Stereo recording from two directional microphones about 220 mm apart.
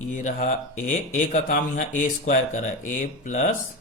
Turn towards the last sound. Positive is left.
turn(degrees=35)  # may be behind; listen again after turning